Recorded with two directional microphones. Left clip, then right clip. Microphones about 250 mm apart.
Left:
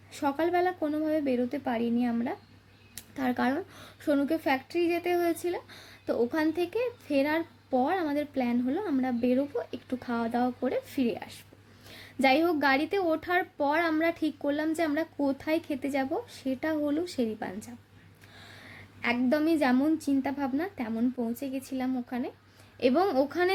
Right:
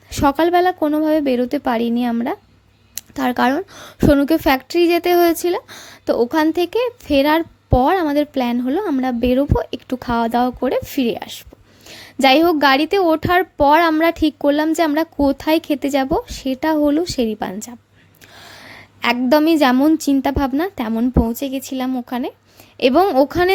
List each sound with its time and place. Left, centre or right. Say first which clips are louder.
0.1 s speech: right 13 dB; right